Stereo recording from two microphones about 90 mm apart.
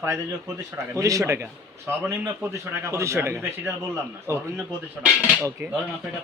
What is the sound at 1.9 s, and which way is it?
Speech, 25° right (ahead or behind).